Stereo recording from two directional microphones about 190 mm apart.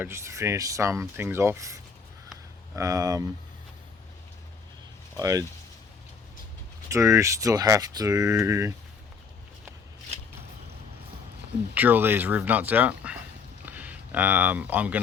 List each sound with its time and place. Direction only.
0.0 s speech: 15° right (ahead or behind)
5.1 s speech: 20° right (ahead or behind)
6.8 s speech: 15° right (ahead or behind)
11.7 s speech: 10° right (ahead or behind)